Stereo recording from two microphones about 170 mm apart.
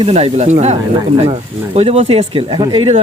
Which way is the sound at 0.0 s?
40° right (ahead or behind).